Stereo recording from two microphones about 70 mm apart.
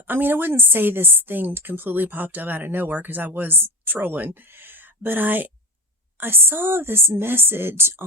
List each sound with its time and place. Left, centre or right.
0.0 s a woman's voice: right